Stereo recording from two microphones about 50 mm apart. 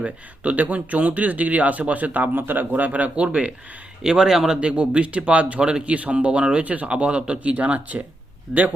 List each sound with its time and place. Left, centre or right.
0.0 s speech: right
4.0 s speech: centre; by 8.0 s right
8.5 s a man's voice: centre